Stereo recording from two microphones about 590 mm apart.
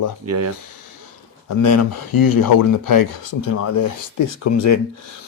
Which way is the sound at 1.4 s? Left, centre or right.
Left.